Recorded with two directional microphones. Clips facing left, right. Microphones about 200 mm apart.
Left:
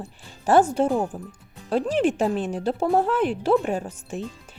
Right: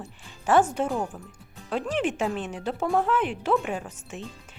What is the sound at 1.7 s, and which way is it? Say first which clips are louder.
Speech: left 5 dB; 35° left (ahead or behind).